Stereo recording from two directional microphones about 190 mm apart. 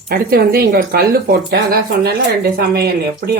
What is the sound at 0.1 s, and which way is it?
Speech, 55° right (ahead or behind).